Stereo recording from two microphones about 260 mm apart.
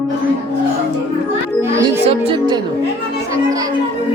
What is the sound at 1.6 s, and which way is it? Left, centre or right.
Music, centre.